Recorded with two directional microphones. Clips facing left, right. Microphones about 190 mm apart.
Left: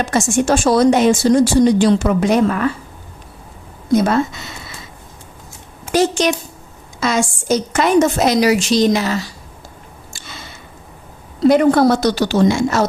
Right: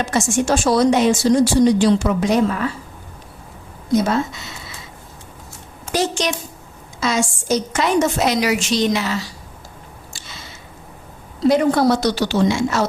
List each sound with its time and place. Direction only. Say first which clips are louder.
0.0 s a woman's voice: left 3 dB; 50° left (ahead or behind)
5.9 s a woman's voice: left 5 dB; 55° left (ahead or behind)
11.4 s a woman's voice: left 4 dB; 55° left (ahead or behind)